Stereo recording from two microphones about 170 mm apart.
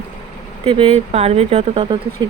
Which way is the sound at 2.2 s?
25° right (ahead or behind).